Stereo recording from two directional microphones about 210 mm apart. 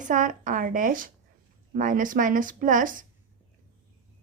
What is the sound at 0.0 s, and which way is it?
A woman's voice, 40° right (ahead or behind).